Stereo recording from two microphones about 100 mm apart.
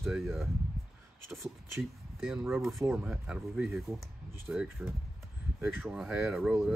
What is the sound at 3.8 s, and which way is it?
Speech, centre (ahead or behind).